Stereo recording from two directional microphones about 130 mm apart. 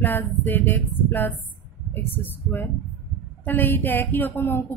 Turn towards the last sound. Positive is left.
turn(degrees=15)  # may be behind; listen again after turning